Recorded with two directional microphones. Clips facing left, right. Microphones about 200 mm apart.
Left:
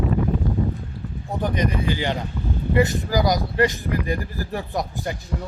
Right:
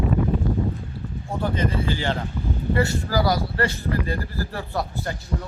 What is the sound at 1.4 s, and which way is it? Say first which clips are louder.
A man's voice: left 1 dB; 15° left (ahead or behind).